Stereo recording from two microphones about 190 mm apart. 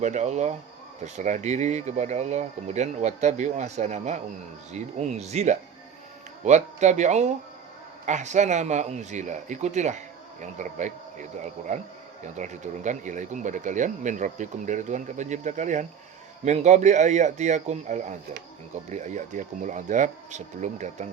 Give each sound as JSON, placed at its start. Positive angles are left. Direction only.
{"t": 0.0, "sound": "speech", "side_deg": -40}